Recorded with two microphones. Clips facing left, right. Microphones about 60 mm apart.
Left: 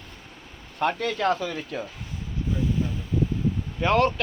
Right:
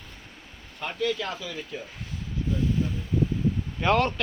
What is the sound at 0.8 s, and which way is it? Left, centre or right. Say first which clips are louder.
Speech: left 4 dB; left.